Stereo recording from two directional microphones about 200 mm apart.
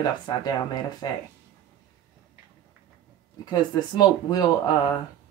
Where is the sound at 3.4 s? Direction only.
20° left (ahead or behind).